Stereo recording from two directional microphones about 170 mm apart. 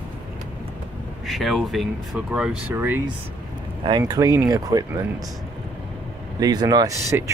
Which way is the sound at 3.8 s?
25° right (ahead or behind).